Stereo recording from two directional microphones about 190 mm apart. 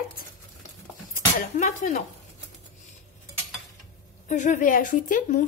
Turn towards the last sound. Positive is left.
turn(degrees=45)  # may be behind; listen again after turning